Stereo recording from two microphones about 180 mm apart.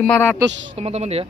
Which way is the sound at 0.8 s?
35° right (ahead or behind).